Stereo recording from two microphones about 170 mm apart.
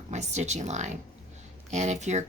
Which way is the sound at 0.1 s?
45° right (ahead or behind).